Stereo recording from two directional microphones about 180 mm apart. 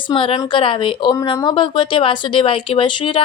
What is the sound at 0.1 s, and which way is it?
A woman's voice, 30° left (ahead or behind).